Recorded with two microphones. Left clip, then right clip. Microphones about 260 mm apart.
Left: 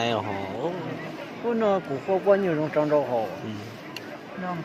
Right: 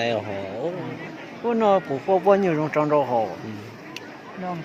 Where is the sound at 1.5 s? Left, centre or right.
Right.